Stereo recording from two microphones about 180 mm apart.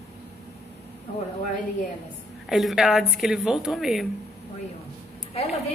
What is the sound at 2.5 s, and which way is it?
A woman's voice, centre (ahead or behind).